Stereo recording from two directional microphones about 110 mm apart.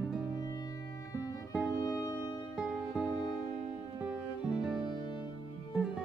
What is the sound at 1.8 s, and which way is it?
Music, 35° left (ahead or behind).